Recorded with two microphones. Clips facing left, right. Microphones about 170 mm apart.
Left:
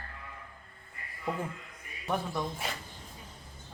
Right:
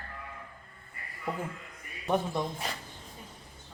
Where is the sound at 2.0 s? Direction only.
20° right (ahead or behind).